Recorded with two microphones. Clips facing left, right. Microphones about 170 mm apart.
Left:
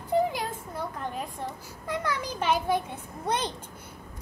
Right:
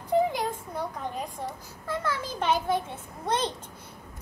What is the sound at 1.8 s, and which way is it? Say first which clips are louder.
A child's voice: even; 15° left (ahead or behind).